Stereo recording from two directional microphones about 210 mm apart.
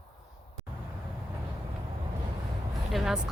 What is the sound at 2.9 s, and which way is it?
Speech, centre (ahead or behind).